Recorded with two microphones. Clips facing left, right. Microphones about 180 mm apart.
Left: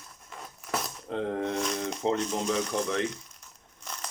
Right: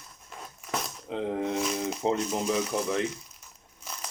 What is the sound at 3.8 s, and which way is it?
Crumpling, 5° right (ahead or behind).